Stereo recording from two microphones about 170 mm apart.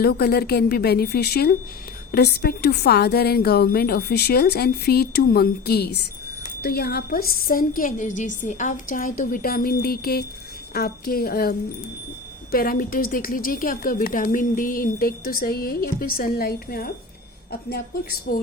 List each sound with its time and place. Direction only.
0.0 s a woman's voice: 65° left (ahead or behind)